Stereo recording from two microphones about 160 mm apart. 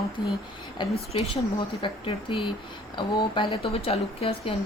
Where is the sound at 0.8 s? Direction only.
35° left (ahead or behind).